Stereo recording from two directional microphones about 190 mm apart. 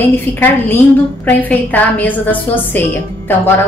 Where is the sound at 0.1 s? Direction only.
10° left (ahead or behind).